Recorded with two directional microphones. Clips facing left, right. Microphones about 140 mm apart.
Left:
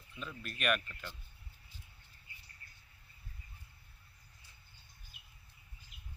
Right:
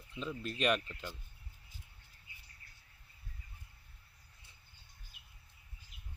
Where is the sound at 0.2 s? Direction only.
25° right (ahead or behind).